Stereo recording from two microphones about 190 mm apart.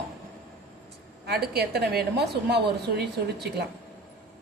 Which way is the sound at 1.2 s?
55° right (ahead or behind).